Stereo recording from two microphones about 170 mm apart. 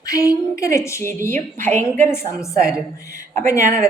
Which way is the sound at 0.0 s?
20° left (ahead or behind).